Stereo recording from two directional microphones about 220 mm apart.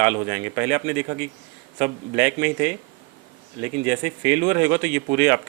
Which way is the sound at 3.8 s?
10° right (ahead or behind).